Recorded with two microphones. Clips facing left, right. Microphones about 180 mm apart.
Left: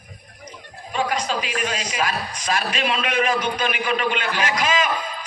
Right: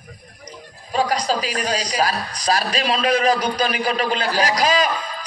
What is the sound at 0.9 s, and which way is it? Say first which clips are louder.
A man's voice: right 3 dB; 35° right (ahead or behind).